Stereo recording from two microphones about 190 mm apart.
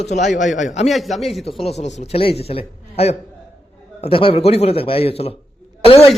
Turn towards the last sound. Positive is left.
turn(degrees=30)  # may be behind; listen again after turning